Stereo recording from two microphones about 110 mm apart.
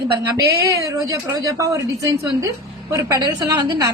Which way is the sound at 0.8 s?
30° right (ahead or behind).